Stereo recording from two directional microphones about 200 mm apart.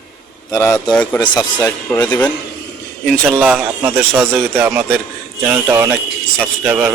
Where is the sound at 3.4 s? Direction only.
5° right (ahead or behind).